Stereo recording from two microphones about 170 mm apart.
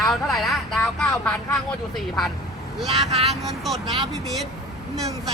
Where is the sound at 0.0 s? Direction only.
Centre (ahead or behind).